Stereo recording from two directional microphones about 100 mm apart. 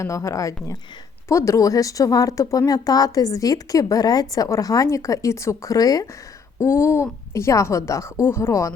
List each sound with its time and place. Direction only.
0.0 s a woman's voice: 30° left (ahead or behind)
6.6 s a woman's voice: 25° left (ahead or behind)